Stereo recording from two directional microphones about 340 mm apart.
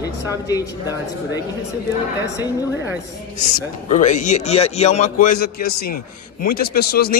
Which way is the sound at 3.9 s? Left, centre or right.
Left.